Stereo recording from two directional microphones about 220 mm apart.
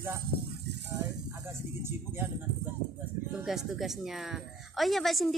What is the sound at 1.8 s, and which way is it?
A man's voice, 10° right (ahead or behind).